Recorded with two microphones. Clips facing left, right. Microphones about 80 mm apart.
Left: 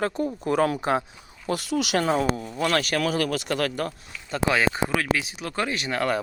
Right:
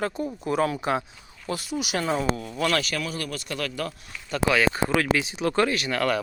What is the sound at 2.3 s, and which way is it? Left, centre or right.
Speech, left.